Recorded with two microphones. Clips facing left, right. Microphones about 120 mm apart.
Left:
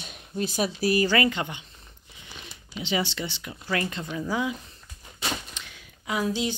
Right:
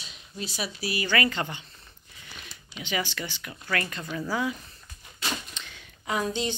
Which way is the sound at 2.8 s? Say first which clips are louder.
Left 3 dB; 25° left (ahead or behind).